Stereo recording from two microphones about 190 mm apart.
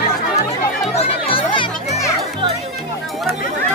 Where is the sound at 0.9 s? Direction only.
30° left (ahead or behind).